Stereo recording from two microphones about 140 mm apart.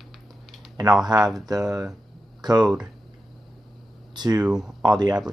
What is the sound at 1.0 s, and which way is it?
Speech, 30° right (ahead or behind).